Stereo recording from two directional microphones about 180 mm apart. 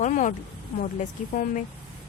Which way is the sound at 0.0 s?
45° left (ahead or behind).